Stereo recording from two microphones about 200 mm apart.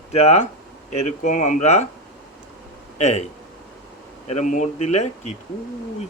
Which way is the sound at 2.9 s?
35° left (ahead or behind).